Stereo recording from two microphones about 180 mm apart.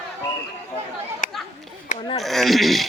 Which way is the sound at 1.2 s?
45° left (ahead or behind).